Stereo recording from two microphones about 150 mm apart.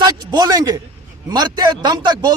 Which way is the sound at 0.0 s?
25° right (ahead or behind).